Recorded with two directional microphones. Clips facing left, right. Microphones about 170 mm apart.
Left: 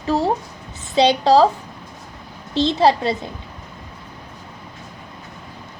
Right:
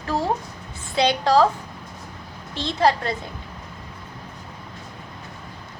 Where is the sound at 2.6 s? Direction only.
20° left (ahead or behind).